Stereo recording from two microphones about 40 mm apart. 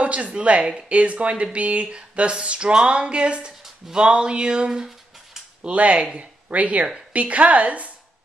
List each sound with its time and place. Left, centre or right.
0.0 s a woman's voice: right
0.7 s a sound: right
0.9 s a woman's voice: right
1.4 s a sound: right
3.9 s speech: right
5.7 s a woman's voice: right